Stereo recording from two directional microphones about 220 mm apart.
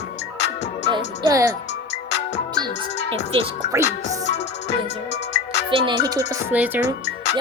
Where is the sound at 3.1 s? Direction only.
25° right (ahead or behind).